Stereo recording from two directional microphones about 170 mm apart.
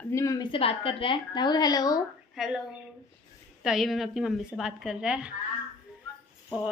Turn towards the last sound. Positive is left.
turn(degrees=-5)  # may be behind; listen again after turning